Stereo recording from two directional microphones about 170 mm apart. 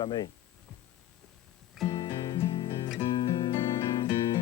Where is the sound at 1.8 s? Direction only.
20° left (ahead or behind).